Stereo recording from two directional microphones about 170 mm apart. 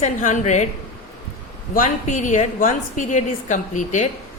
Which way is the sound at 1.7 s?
50° left (ahead or behind).